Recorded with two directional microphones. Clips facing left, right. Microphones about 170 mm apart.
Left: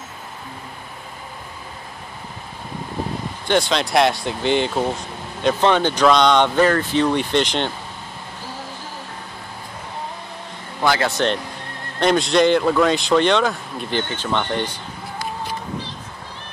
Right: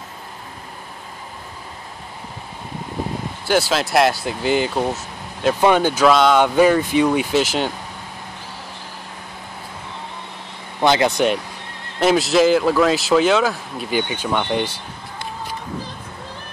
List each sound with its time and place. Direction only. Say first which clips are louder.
3.4 s speech: right 1 dB; 5° right (ahead or behind)
10.8 s speech: right 3 dB; 20° right (ahead or behind)
12.0 s speech: right 1 dB; 5° right (ahead or behind)